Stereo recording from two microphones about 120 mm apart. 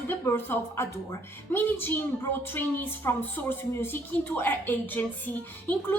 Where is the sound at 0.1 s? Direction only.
20° left (ahead or behind).